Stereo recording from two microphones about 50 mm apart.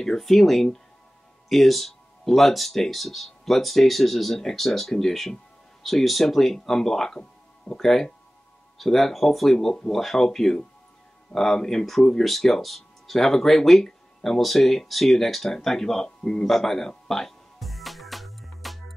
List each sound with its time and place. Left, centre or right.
0.0 s speech: centre
7.2 s music: centre
7.8 s speech: centre
13.8 s a sound: centre